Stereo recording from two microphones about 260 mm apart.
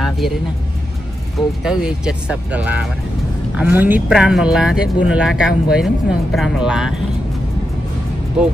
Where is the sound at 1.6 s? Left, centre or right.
Centre.